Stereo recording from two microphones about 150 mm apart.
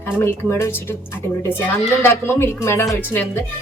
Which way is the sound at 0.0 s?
15° left (ahead or behind).